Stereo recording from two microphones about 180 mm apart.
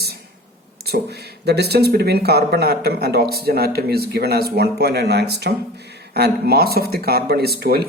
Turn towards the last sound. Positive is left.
turn(degrees=-60)  # may be behind; listen again after turning